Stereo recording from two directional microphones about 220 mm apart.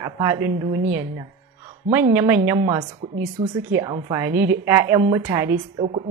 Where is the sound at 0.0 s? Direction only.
15° right (ahead or behind).